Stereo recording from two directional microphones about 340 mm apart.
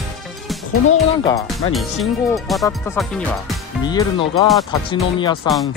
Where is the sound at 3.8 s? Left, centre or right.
Centre.